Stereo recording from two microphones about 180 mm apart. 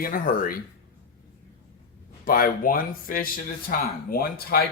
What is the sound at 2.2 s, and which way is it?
Speech, 55° left (ahead or behind).